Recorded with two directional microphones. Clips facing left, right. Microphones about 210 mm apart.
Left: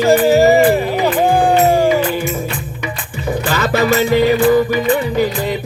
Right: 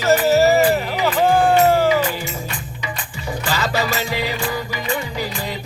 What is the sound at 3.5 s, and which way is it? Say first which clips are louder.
Music: left 7 dB; 55° left (ahead or behind).